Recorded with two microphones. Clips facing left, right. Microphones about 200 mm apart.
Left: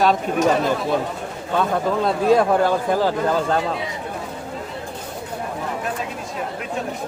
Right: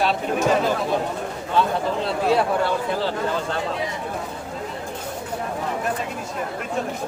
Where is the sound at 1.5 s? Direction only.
45° left (ahead or behind).